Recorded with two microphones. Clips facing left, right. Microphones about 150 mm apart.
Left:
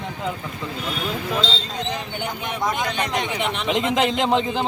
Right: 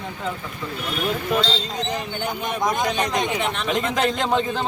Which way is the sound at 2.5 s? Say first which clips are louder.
Right 2 dB; 15° right (ahead or behind).